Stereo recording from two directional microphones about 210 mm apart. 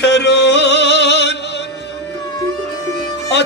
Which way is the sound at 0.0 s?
55° left (ahead or behind).